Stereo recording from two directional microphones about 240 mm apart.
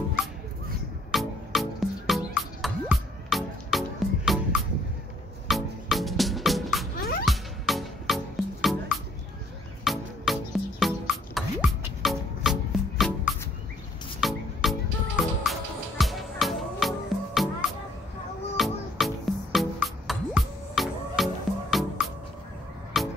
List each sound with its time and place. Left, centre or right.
1.1 s music: centre
7.0 s music: left
7.2 s music: centre